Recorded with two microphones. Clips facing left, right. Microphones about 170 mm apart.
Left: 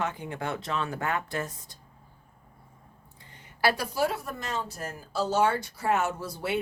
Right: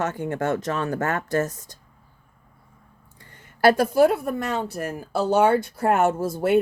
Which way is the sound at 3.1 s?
45° right (ahead or behind).